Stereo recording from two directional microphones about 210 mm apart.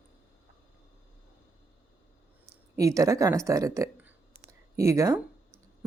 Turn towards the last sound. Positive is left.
turn(degrees=-15)  # may be behind; listen again after turning